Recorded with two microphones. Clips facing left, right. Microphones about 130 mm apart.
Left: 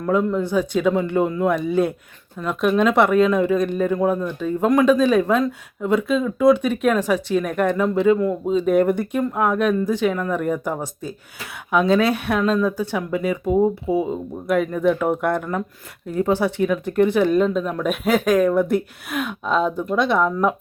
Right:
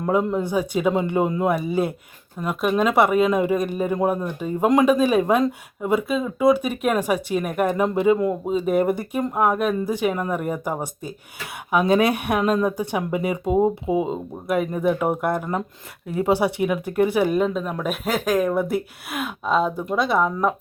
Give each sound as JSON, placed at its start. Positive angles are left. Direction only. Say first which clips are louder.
{"t": 0.0, "sound": "speech", "louder": "left 1 dB", "side_deg": -20}